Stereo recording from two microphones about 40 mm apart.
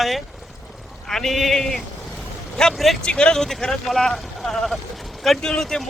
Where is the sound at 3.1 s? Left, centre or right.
Left.